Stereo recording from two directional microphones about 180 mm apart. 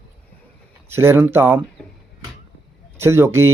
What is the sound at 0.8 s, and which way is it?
Speech, 15° right (ahead or behind).